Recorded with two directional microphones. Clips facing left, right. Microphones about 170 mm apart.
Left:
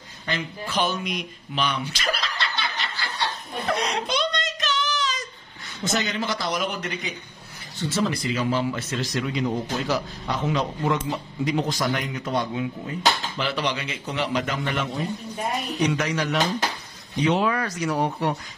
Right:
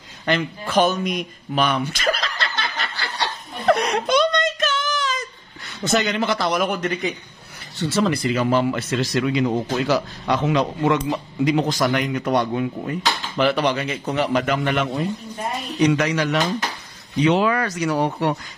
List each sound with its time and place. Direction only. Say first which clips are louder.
0.3 s speech: right 8 dB; 70° right (ahead or behind)
0.7 s chuckle: right 7 dB; 45° right (ahead or behind)
3.2 s snicker: right 1 dB; 70° right (ahead or behind)
4.1 s a sound: right 8 dB; 50° right (ahead or behind)
5.9 s a man's voice: right 6 dB; 65° right (ahead or behind)
7.9 s a man's voice: right 5 dB; 65° right (ahead or behind)
16.0 s speech: right 3 dB; 90° right